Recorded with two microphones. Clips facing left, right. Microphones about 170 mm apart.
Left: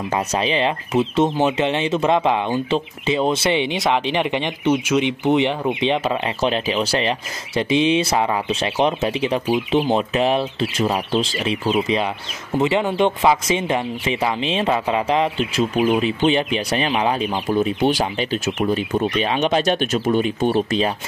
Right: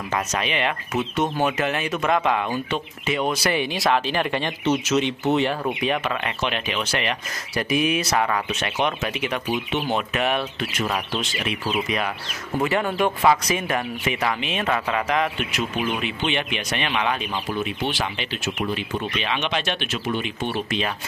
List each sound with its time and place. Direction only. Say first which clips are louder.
0.3 s speech: left 5 dB; 30° left (ahead or behind)